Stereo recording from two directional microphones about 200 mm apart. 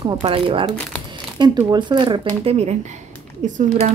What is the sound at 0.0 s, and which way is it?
Speech, 30° right (ahead or behind).